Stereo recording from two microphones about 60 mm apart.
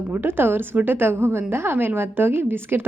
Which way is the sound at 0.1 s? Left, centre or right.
Right.